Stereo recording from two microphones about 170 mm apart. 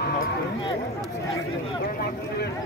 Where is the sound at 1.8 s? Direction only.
65° left (ahead or behind).